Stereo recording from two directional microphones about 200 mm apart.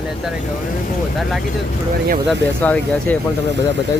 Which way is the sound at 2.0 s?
55° right (ahead or behind).